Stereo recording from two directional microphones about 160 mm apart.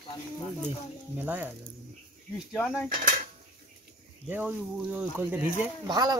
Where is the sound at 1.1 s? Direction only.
10° right (ahead or behind).